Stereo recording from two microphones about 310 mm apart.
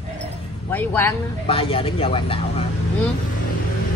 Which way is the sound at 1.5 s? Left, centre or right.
Centre.